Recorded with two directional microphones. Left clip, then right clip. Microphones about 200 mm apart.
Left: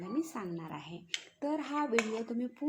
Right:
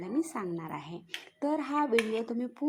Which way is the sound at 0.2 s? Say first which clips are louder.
Right 5 dB; 20° right (ahead or behind).